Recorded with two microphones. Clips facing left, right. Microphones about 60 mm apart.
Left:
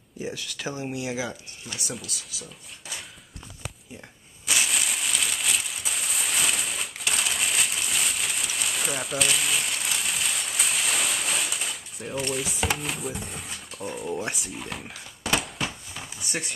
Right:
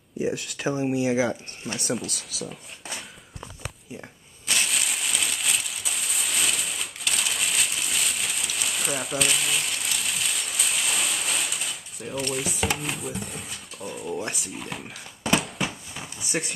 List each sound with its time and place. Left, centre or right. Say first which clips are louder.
0.2 s speech: right 6 dB; right
1.8 s speech: right 8 dB; right
4.5 s a sound: even; centre